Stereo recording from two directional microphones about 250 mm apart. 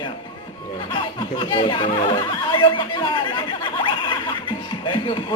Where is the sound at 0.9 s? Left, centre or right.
Centre.